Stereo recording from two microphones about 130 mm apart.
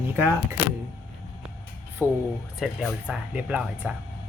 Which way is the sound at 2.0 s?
15° right (ahead or behind).